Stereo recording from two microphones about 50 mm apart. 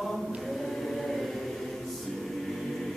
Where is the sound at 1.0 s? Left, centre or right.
Centre.